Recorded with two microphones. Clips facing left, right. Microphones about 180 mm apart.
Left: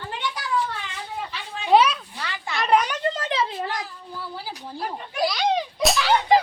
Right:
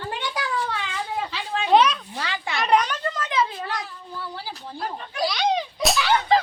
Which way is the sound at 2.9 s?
25° left (ahead or behind).